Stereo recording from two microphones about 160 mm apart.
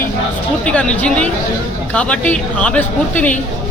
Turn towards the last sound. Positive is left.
turn(degrees=10)  # may be behind; listen again after turning